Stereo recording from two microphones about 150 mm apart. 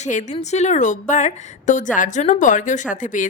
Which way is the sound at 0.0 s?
55° left (ahead or behind).